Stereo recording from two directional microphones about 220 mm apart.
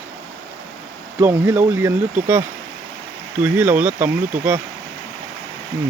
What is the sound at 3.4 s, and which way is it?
Speech, 5° right (ahead or behind).